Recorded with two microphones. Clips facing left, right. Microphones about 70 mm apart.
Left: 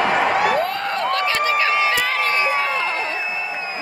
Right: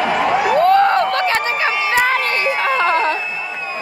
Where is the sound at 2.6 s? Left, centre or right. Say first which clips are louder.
Right 7 dB; right.